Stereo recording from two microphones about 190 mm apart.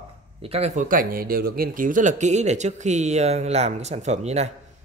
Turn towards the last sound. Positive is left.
turn(degrees=-35)  # may be behind; listen again after turning